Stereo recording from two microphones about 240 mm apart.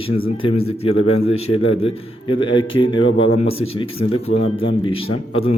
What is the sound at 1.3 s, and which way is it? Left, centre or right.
Speech, left.